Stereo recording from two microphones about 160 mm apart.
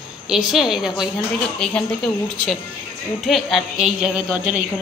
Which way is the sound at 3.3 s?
Centre (ahead or behind).